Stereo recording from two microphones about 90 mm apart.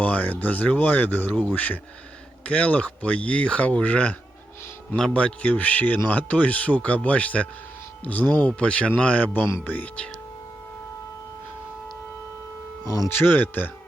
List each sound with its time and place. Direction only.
0.0 s speech: 15° left (ahead or behind)
12.8 s speech: 35° left (ahead or behind)
13.1 s speech: 20° left (ahead or behind)